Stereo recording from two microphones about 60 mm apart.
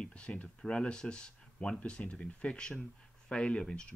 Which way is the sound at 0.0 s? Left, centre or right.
Centre.